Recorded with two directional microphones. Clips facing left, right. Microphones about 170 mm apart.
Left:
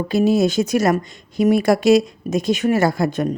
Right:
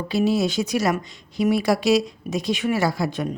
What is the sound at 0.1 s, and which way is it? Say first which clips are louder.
A woman's voice: left 4 dB; 45° left (ahead or behind).